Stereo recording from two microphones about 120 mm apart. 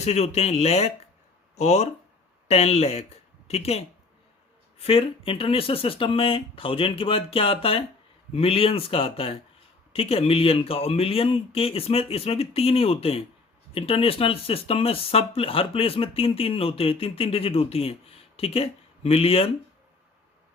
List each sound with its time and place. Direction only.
0.0 s speech: 65° left (ahead or behind)